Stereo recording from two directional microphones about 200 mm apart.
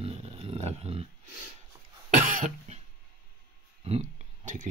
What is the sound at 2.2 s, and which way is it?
Cough, 40° right (ahead or behind).